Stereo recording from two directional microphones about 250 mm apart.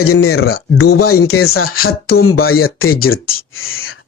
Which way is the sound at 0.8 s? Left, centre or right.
Left.